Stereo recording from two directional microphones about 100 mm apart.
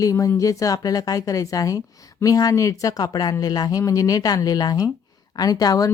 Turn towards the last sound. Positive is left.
turn(degrees=40)  # may be behind; listen again after turning